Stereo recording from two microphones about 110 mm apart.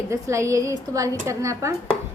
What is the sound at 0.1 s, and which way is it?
A woman's voice, 25° right (ahead or behind).